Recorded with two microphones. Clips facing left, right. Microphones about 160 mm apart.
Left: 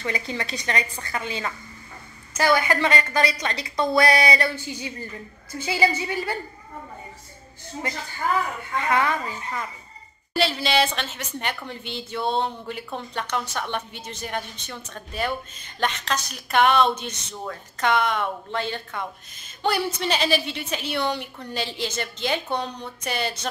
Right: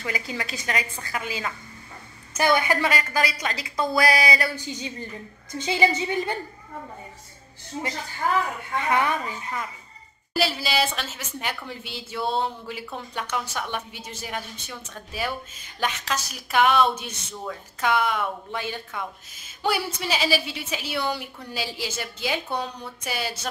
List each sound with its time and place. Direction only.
0.4 s speech: 5° right (ahead or behind)
2.3 s speech: 20° right (ahead or behind)
4.6 s a woman's voice: 20° right (ahead or behind)
8.7 s speech: 15° right (ahead or behind)